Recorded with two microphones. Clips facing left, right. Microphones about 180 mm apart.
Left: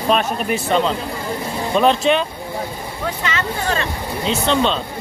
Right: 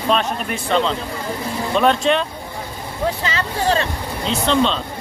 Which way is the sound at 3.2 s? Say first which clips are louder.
Even; 30° right (ahead or behind).